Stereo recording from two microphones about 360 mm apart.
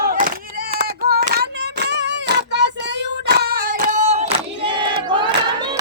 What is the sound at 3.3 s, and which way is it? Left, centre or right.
Battle cry, right.